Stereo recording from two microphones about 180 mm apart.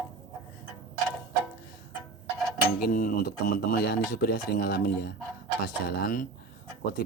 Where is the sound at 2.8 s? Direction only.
55° left (ahead or behind).